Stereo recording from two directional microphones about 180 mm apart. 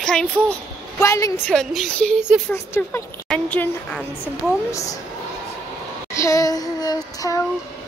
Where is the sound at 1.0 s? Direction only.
15° left (ahead or behind).